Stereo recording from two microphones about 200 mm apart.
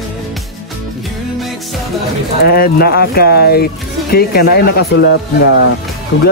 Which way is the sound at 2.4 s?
50° left (ahead or behind).